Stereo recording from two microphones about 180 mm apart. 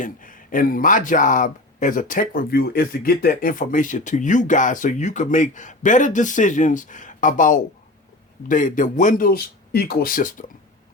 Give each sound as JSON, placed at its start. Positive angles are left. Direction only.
{"t": 0.0, "sound": "speech", "side_deg": 50}